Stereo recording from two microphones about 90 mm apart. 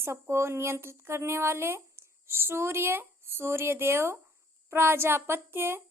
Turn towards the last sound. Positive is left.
turn(degrees=-25)  # may be behind; listen again after turning